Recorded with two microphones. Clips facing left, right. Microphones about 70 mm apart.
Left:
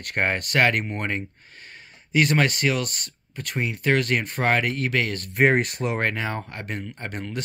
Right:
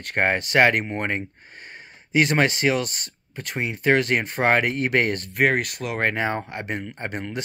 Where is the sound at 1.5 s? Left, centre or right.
Right.